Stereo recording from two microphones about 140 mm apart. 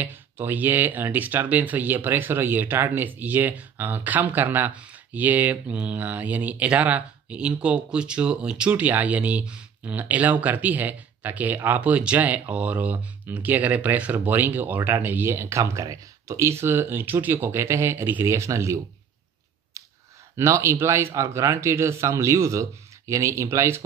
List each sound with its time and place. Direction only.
0.0 s speech: 15° right (ahead or behind)
20.3 s speech: 20° right (ahead or behind)